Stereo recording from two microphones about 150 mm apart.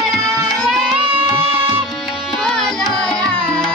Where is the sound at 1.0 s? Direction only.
35° right (ahead or behind).